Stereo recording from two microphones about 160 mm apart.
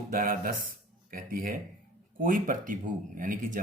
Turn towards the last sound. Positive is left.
turn(degrees=-60)  # may be behind; listen again after turning